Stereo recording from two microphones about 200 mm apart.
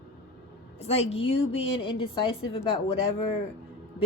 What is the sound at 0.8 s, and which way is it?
A woman's voice, 30° left (ahead or behind).